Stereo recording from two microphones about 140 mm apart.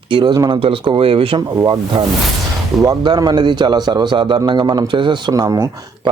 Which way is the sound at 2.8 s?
30° right (ahead or behind).